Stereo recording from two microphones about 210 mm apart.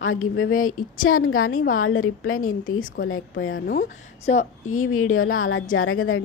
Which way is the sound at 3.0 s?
70° left (ahead or behind).